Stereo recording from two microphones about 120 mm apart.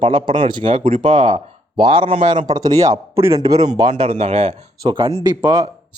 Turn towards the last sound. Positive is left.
turn(degrees=-35)  # may be behind; listen again after turning